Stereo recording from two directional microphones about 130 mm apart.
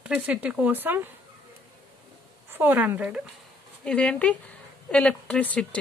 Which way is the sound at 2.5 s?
15° right (ahead or behind).